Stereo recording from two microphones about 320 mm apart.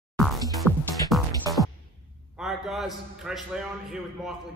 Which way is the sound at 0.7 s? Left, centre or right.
Centre.